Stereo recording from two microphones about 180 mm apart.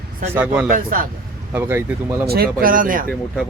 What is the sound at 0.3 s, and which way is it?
Speech, 5° right (ahead or behind).